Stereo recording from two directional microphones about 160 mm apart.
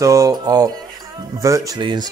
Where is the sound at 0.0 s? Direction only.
20° right (ahead or behind).